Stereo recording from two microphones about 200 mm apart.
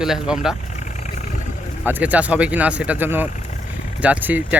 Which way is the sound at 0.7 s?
35° left (ahead or behind).